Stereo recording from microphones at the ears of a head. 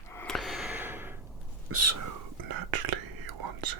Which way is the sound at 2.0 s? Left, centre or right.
Right.